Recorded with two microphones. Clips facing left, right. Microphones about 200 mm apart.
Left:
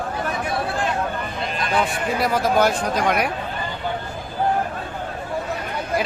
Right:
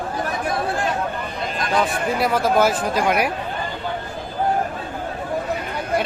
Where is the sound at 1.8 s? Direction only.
Centre (ahead or behind).